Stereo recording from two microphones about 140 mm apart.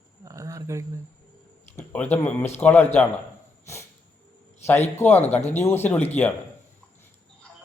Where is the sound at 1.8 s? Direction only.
10° left (ahead or behind).